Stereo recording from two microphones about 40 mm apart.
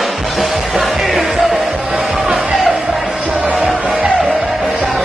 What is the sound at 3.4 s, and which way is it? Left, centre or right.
Music, right.